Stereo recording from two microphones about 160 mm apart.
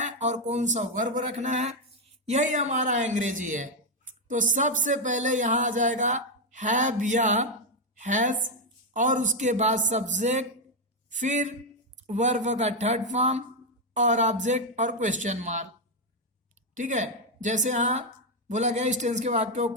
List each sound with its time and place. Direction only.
0.0 s a man's voice: 50° right (ahead or behind)
16.7 s a man's voice: 50° right (ahead or behind)